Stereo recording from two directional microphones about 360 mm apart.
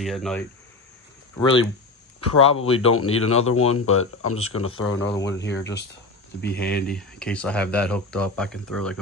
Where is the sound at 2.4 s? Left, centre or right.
Centre.